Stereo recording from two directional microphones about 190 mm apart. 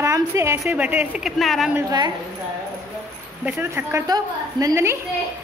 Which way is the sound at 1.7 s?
20° right (ahead or behind).